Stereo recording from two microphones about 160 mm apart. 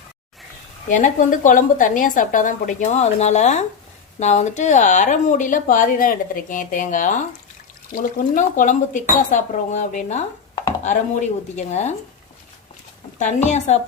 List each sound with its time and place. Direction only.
0.9 s speech: 55° left (ahead or behind)
13.1 s speech: 50° left (ahead or behind)